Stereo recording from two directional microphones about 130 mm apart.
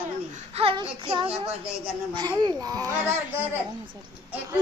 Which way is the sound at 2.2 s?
30° right (ahead or behind).